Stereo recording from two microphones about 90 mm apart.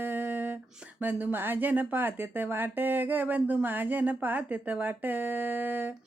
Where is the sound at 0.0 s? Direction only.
20° right (ahead or behind).